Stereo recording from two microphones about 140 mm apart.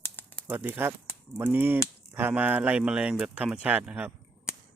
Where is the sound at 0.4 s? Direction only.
15° right (ahead or behind).